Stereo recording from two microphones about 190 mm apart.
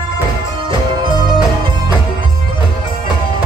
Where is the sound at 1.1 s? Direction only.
25° right (ahead or behind).